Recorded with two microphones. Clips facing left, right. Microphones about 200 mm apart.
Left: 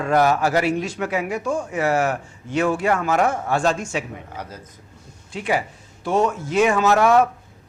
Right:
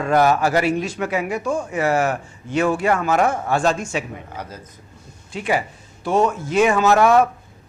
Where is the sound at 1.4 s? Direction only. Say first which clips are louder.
Right 1 dB; 25° right (ahead or behind).